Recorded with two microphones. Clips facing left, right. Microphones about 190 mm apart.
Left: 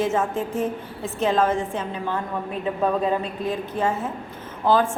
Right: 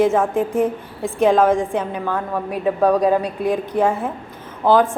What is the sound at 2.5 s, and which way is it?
Speech, 75° right (ahead or behind).